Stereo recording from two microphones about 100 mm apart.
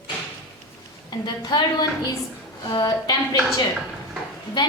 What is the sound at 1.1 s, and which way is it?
A woman's voice, 45° left (ahead or behind).